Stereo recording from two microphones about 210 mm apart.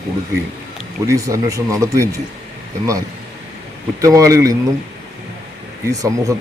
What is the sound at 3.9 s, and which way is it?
Speech, 15° right (ahead or behind).